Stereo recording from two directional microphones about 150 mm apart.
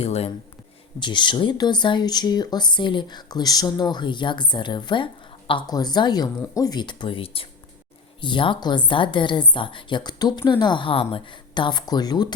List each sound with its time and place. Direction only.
0.0 s speech: 45° left (ahead or behind)
0.9 s speech: 30° left (ahead or behind)